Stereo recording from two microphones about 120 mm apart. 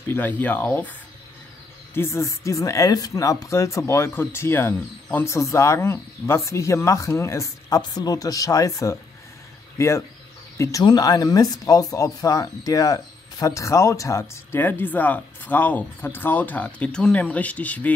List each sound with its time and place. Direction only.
0.1 s speech: 15° left (ahead or behind)
2.0 s speech: 25° left (ahead or behind)